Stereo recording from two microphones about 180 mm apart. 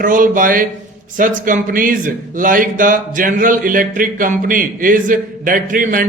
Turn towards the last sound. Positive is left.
turn(degrees=-50)  # may be behind; listen again after turning